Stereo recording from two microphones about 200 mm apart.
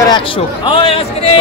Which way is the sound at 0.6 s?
30° left (ahead or behind).